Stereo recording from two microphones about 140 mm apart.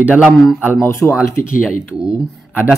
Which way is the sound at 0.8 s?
20° left (ahead or behind).